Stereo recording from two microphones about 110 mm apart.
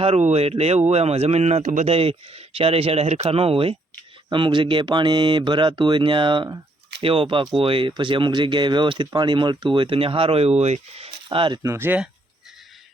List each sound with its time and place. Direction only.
0.0 s speech: 80° right; by 3.8 s 60° right (ahead or behind)
4.3 s speech: 50° right (ahead or behind)
11.6 s speech: 20° right (ahead or behind)